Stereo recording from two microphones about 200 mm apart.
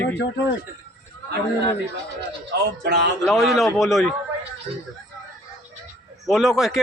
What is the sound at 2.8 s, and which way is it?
Speech, 60° right (ahead or behind).